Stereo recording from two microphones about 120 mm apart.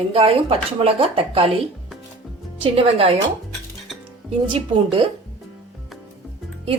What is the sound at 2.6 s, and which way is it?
Speech, 50° right (ahead or behind).